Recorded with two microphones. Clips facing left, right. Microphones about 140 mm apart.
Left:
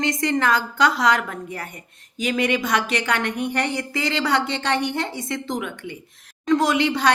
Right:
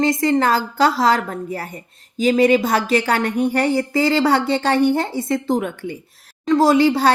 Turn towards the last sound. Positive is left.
turn(degrees=-35)  # may be behind; listen again after turning